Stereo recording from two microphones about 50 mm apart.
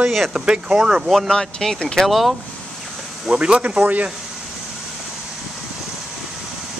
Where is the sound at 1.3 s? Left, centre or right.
Centre.